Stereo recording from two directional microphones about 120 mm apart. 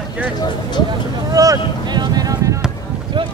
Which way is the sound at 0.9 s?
30° right (ahead or behind).